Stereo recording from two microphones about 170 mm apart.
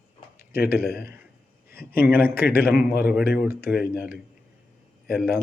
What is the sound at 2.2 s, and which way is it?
Speech, 60° left (ahead or behind).